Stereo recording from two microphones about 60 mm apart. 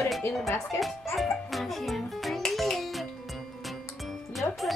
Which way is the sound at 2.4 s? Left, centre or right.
Centre.